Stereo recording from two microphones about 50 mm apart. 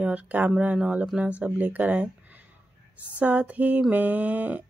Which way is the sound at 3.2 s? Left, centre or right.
Right.